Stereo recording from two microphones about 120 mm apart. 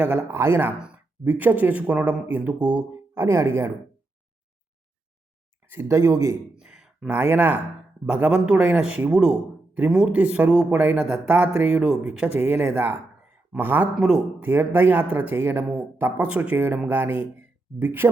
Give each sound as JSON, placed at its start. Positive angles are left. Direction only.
{"t": 0.0, "sound": "a man's voice", "side_deg": -10}
{"t": 5.6, "sound": "speech", "side_deg": -20}
{"t": 6.6, "sound": "a sound", "side_deg": -5}
{"t": 8.0, "sound": "a man's voice", "side_deg": -10}